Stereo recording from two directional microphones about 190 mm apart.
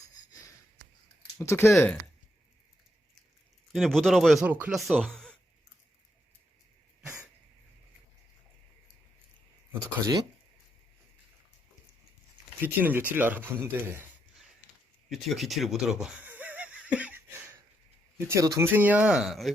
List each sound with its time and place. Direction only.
0.3 s sniff: 20° left (ahead or behind)
1.4 s speech: 15° left (ahead or behind)
3.7 s speech: centre (ahead or behind)
12.6 s speech: 10° right (ahead or behind)
15.1 s speech: centre (ahead or behind)